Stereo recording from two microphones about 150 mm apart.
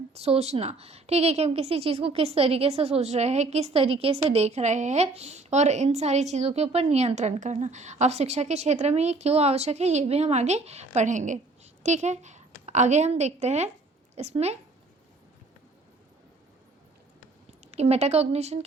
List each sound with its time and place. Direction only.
0.1 s a woman's voice: 45° right (ahead or behind)
17.7 s a woman's voice: 45° right (ahead or behind)